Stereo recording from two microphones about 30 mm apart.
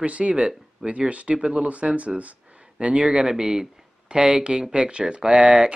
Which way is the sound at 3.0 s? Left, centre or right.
Right.